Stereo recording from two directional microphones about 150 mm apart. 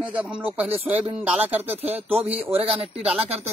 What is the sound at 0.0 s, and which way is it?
Speech, 10° right (ahead or behind).